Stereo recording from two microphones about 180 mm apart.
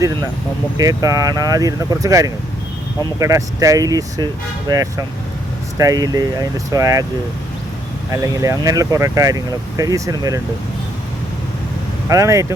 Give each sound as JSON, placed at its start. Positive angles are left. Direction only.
{"t": 0.8, "sound": "speech", "side_deg": -20}
{"t": 8.1, "sound": "speech", "side_deg": -15}
{"t": 12.0, "sound": "speech", "side_deg": -15}